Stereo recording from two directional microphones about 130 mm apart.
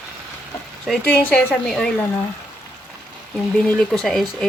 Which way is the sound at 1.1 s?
15° left (ahead or behind).